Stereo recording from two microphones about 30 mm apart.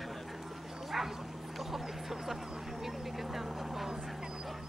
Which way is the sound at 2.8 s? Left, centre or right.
Centre.